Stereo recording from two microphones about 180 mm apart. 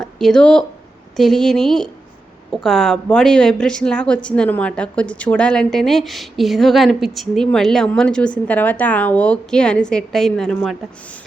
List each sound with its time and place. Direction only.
0.0 s a woman's voice: centre (ahead or behind)